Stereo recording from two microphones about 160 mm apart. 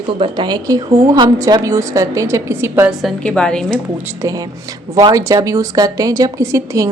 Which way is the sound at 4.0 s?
15° right (ahead or behind).